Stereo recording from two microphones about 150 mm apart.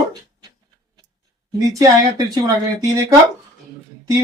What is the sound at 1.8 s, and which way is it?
Speech, 25° right (ahead or behind).